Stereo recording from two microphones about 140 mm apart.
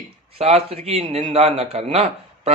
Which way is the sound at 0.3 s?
45° right (ahead or behind).